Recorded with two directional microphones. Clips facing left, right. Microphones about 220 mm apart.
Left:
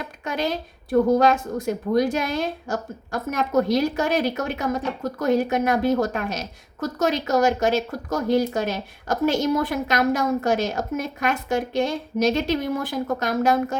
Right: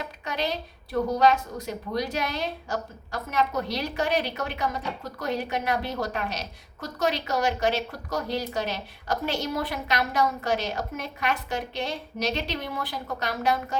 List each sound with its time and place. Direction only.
0.3 s a woman's voice: 50° left (ahead or behind)